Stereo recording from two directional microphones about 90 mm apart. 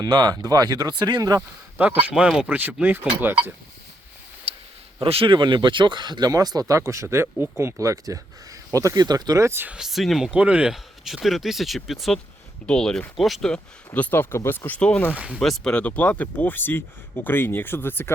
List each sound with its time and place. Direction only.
0.0 s speech: 50° right (ahead or behind)
1.9 s speech: 20° right (ahead or behind)
4.5 s a sound: 90° right
4.9 s speech: 85° right; by 7.7 s 20° right (ahead or behind)
7.8 s speech: 35° right (ahead or behind)
9.5 s speech: 25° right (ahead or behind)
9.7 s speech: 5° right (ahead or behind)
10.3 s speech: 10° right (ahead or behind)
13.5 s speech: 15° left (ahead or behind)
15.1 s speech: 15° right (ahead or behind)
15.4 s speech: 5° left (ahead or behind); by 18.1 s 25° left (ahead or behind)